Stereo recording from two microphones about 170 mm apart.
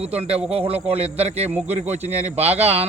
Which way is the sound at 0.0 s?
35° right (ahead or behind).